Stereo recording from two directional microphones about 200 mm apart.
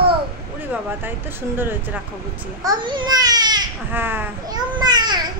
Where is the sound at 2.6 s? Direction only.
20° right (ahead or behind).